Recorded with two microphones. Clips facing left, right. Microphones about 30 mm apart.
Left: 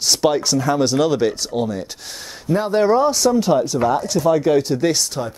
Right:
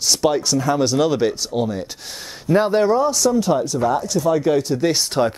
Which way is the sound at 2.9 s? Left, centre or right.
Left.